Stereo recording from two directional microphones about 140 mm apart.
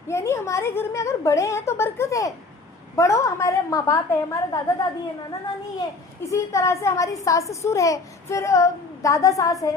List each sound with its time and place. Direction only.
0.1 s a child's voice: 20° left (ahead or behind)
6.3 s a child's voice: 20° left (ahead or behind)